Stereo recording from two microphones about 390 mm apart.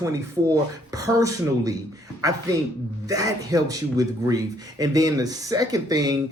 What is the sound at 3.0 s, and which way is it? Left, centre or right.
Speech, centre.